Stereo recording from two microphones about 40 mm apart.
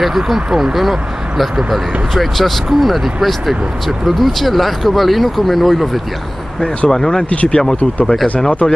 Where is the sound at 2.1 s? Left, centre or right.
Centre.